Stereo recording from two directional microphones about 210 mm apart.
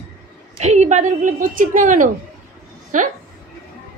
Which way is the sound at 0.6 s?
35° right (ahead or behind).